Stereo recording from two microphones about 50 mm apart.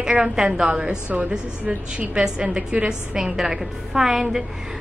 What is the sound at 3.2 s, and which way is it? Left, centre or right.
A woman's voice, centre.